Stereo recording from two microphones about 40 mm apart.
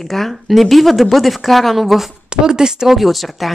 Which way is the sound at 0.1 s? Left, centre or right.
Centre.